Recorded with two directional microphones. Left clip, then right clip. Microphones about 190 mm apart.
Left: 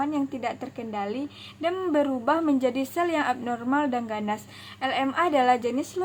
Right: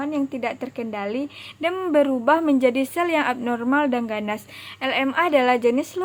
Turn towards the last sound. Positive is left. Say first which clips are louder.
# right 4 dB
turn(degrees=-25)  # may be behind; listen again after turning